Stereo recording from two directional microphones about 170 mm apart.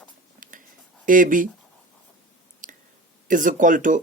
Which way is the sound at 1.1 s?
50° right (ahead or behind).